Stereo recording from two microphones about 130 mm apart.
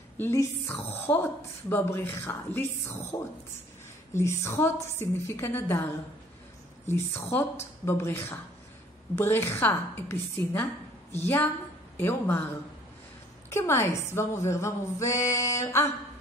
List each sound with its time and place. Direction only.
0.2 s a woman's voice: 20° left (ahead or behind)
3.1 s speech: 30° left (ahead or behind)
6.9 s a woman's voice: 15° left (ahead or behind)
13.5 s speech: 20° left (ahead or behind)